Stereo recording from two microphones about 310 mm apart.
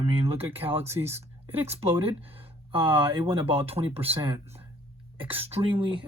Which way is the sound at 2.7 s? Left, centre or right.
Centre.